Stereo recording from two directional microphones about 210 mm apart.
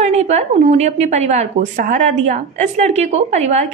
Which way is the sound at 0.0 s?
30° right (ahead or behind).